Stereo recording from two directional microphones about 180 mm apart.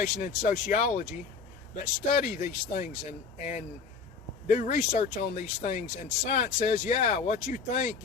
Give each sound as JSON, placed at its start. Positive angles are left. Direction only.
{"t": 0.0, "sound": "speech", "side_deg": 45}